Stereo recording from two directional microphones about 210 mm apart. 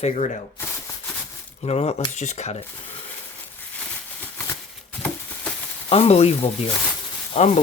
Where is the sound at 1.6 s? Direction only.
30° left (ahead or behind).